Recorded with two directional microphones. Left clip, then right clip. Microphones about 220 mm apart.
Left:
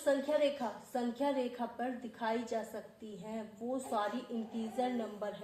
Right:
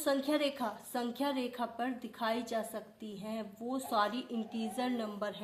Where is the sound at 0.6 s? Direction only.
75° right (ahead or behind).